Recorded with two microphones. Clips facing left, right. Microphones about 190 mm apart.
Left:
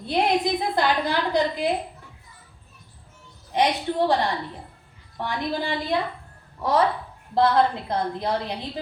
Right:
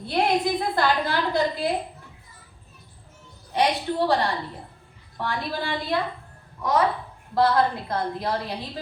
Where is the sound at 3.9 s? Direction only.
20° left (ahead or behind).